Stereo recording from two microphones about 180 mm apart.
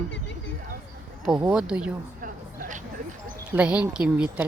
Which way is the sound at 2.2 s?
45° right (ahead or behind).